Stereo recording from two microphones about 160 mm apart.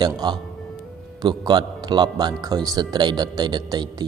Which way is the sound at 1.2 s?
25° right (ahead or behind).